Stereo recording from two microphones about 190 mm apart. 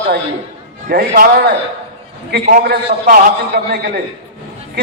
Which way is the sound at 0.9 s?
50° right (ahead or behind).